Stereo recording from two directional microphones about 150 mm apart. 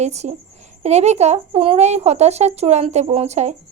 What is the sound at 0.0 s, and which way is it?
A child's voice, 50° right (ahead or behind).